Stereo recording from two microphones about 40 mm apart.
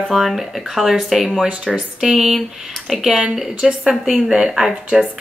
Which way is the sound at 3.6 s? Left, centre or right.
Centre.